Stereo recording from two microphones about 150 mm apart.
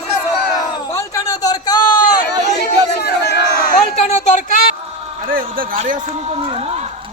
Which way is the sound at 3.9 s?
45° left (ahead or behind).